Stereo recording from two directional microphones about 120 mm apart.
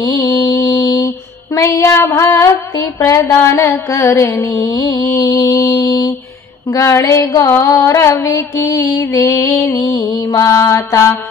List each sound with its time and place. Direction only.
0.0 s mantra: 35° left (ahead or behind)
1.8 s female singing: 20° left (ahead or behind)